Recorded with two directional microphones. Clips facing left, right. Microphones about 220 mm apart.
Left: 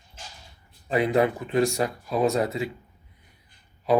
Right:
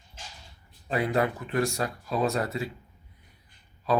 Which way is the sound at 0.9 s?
20° left (ahead or behind).